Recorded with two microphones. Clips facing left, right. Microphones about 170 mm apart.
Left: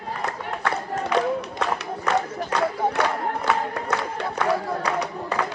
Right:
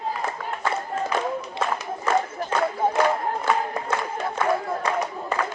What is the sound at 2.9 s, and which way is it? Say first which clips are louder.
Crowd: right 2 dB; 70° left (ahead or behind).